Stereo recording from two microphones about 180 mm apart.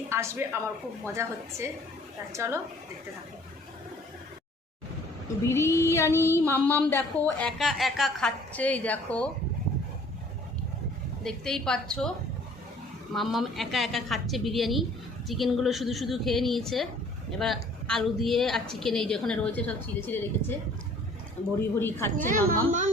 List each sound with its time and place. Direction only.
0.1 s a woman's voice: 15° right (ahead or behind)
5.5 s a woman's voice: 15° left (ahead or behind)
11.2 s a woman's voice: 5° left (ahead or behind)
13.1 s a woman's voice: centre (ahead or behind)
21.8 s a woman's voice: 15° left (ahead or behind)
22.2 s a woman's voice: 45° right (ahead or behind)